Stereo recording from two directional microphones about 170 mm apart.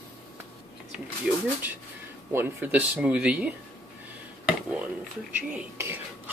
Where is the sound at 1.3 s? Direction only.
5° right (ahead or behind).